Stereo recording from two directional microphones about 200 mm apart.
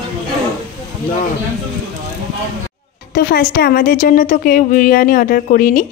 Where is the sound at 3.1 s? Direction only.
50° left (ahead or behind).